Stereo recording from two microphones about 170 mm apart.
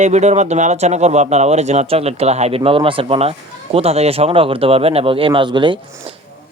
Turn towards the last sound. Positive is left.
turn(degrees=-30)  # may be behind; listen again after turning